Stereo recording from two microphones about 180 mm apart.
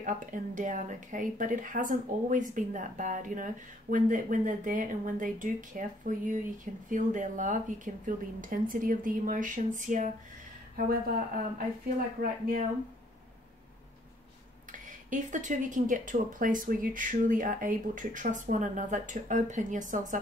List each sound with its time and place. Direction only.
0.0 s speech: 45° right (ahead or behind)
12.2 s speech: 50° right (ahead or behind)
14.7 s speech: 45° right (ahead or behind)